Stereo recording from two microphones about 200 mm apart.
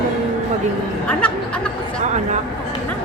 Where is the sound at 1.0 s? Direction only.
5° left (ahead or behind).